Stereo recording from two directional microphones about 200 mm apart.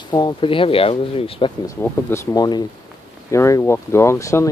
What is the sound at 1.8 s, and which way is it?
Speech, 15° left (ahead or behind).